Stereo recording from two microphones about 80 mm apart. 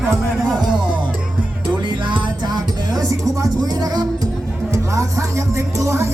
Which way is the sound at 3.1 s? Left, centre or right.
Right.